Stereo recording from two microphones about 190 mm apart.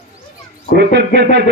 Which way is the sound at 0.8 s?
65° right (ahead or behind).